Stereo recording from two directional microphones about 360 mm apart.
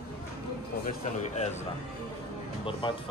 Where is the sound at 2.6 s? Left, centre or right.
Centre.